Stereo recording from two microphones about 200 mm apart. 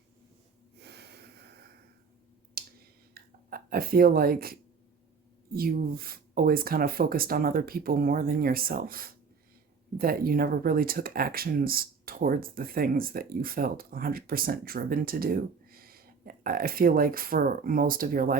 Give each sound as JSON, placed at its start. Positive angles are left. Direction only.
{"t": 0.8, "sound": "snort", "side_deg": -55}
{"t": 2.6, "sound": "clicking", "side_deg": -50}
{"t": 3.2, "sound": "a sound", "side_deg": -50}
{"t": 5.5, "sound": "speech", "side_deg": -45}